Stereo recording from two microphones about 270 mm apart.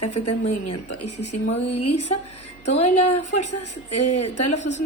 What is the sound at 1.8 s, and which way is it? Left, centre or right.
Speech, left.